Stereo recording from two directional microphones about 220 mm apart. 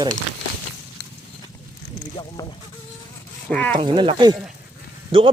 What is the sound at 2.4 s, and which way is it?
Speech, 15° left (ahead or behind).